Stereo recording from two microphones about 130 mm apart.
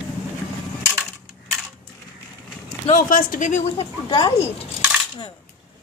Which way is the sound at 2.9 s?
90° left.